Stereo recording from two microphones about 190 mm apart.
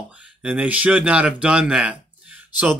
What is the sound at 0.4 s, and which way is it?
Speech, 5° right (ahead or behind).